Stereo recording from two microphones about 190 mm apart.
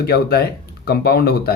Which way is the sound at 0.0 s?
55° left (ahead or behind).